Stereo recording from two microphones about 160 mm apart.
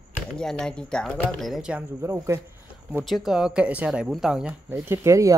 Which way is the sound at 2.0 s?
20° right (ahead or behind).